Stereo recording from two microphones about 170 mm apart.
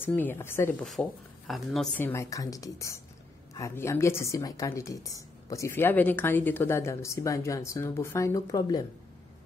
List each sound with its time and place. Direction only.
0.0 s a woman's voice: 10° left (ahead or behind)
1.0 s speech: 5° right (ahead or behind)
2.0 s a woman's voice: 15° left (ahead or behind)